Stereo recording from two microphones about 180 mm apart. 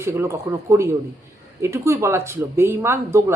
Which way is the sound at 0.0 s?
15° right (ahead or behind).